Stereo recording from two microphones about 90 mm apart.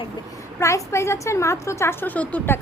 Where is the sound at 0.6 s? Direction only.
35° left (ahead or behind).